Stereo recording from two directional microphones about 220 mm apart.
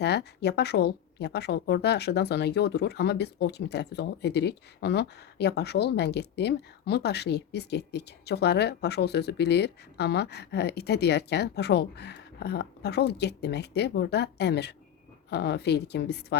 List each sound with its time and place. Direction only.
0.0 s speech: 50° left (ahead or behind)